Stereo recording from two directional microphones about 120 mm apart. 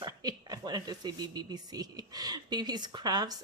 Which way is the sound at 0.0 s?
30° right (ahead or behind).